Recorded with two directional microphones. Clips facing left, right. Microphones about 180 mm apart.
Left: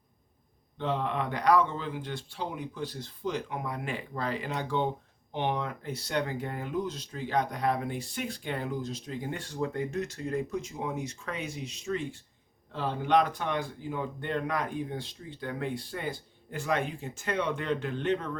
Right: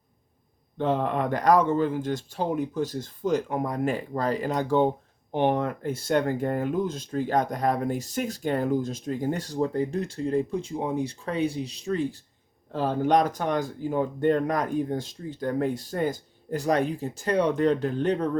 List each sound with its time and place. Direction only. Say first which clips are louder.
0.8 s speech: right 6 dB; 45° right (ahead or behind)